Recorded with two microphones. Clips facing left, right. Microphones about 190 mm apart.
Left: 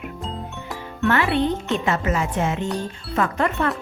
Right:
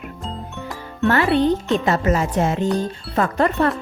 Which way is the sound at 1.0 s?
35° right (ahead or behind).